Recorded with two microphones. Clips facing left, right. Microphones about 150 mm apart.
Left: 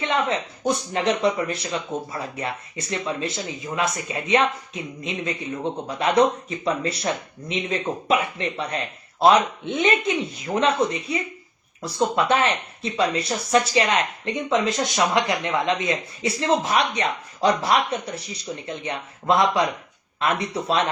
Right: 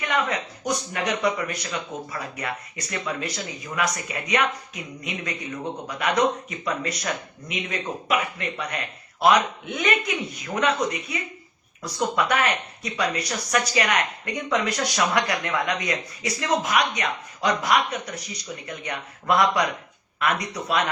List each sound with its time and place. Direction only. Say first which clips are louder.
0.0 s speech: left 2 dB; 25° left (ahead or behind)